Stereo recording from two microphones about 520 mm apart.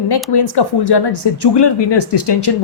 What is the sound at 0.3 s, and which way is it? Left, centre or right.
A woman's voice, left.